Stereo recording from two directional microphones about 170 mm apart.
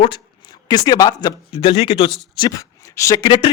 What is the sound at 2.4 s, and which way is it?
Speech, 20° left (ahead or behind).